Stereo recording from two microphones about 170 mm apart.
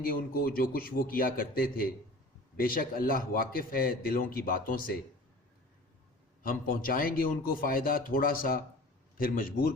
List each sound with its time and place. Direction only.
0.0 s a man's voice: 60° left (ahead or behind)
6.4 s a man's voice: 55° left (ahead or behind)